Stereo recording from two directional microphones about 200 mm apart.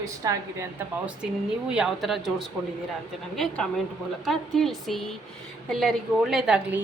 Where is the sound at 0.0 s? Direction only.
15° right (ahead or behind).